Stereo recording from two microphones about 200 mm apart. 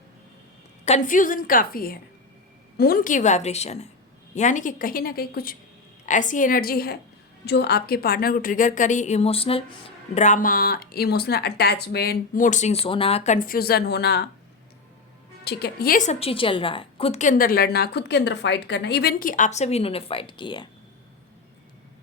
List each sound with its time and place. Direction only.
0.9 s a woman's voice: 40° left (ahead or behind); by 14.3 s 55° left (ahead or behind)
15.4 s a woman's voice: 55° left (ahead or behind); by 20.7 s 25° left (ahead or behind)